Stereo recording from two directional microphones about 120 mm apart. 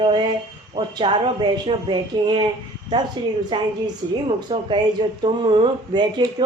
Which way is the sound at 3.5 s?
40° right (ahead or behind).